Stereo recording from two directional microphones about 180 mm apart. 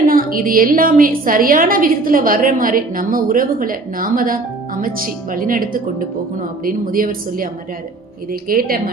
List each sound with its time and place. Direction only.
0.0 s a woman's voice: 50° right (ahead or behind)